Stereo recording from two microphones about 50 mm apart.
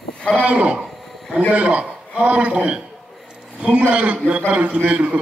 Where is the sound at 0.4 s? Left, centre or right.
Right.